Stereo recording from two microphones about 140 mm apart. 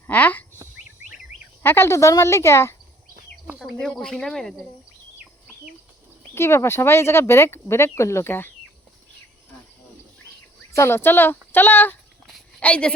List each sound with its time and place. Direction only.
0.1 s speech: 10° left (ahead or behind)
1.6 s speech: 15° left (ahead or behind)
3.6 s speech: 5° left (ahead or behind)
6.3 s speech: 20° left (ahead or behind)
10.8 s speech: 15° left (ahead or behind)
12.3 s a sound: 10° left (ahead or behind)